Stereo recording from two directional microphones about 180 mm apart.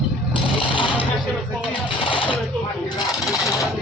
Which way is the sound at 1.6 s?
25° left (ahead or behind).